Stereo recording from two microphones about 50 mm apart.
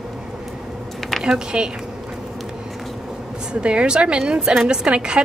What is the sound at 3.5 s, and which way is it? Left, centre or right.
A woman's voice, right.